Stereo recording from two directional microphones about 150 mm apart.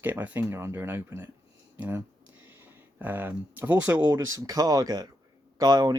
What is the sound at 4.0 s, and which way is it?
Speech, 20° right (ahead or behind).